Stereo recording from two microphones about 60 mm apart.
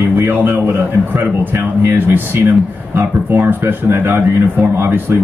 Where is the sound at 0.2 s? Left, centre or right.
Right.